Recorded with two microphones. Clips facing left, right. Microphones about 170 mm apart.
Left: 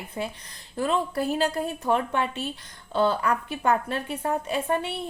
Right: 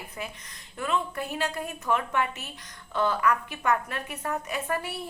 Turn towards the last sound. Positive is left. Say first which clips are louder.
# left 4 dB
turn(degrees=25)  # may be behind; listen again after turning